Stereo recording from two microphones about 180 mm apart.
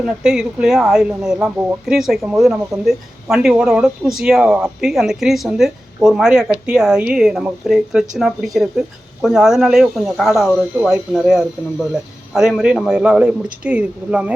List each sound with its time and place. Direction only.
0.0 s speech: 5° right (ahead or behind)